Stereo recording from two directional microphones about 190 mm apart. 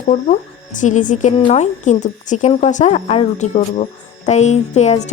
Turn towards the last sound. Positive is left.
turn(degrees=35)  # may be behind; listen again after turning